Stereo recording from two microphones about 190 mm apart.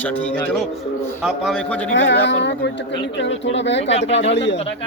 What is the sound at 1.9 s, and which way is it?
Speech, 75° left (ahead or behind).